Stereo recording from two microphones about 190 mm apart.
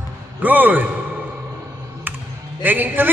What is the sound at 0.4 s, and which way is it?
Speech, 10° right (ahead or behind).